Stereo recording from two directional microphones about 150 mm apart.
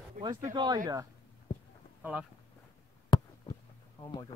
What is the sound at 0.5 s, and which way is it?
Speech, 25° right (ahead or behind).